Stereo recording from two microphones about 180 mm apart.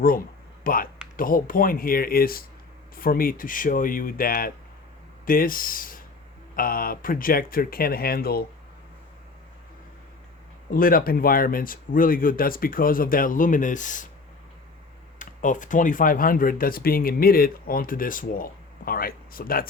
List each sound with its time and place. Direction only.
0.0 s a sound: 55° left (ahead or behind)
1.1 s speech: 50° left (ahead or behind)
10.8 s speech: 50° left (ahead or behind)
15.2 s speech: 45° left (ahead or behind)